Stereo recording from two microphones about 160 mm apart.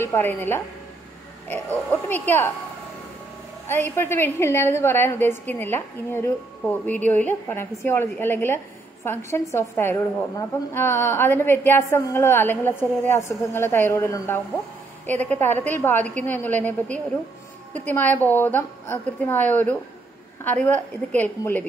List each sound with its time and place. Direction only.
0.0 s a woman's voice: 15° left (ahead or behind)
3.6 s a woman's voice: 15° left (ahead or behind)